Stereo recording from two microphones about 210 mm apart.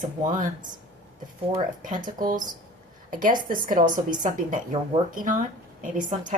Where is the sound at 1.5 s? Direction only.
40° right (ahead or behind).